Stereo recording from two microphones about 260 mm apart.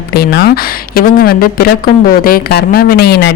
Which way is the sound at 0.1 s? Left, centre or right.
Left.